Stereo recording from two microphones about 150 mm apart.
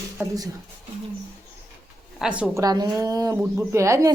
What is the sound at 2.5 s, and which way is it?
Speech, 25° right (ahead or behind).